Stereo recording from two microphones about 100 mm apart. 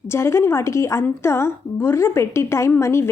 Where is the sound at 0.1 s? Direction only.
25° left (ahead or behind).